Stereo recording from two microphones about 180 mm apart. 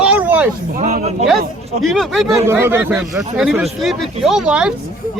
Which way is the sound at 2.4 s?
15° right (ahead or behind).